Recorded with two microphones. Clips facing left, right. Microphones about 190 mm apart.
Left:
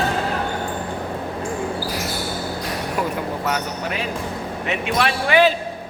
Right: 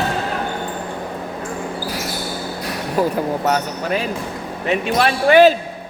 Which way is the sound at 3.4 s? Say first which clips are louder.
Right 5 dB; 40° right (ahead or behind).